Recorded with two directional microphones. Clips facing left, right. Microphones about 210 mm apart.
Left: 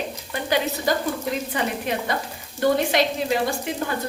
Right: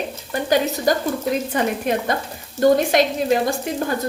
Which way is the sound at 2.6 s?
45° right (ahead or behind).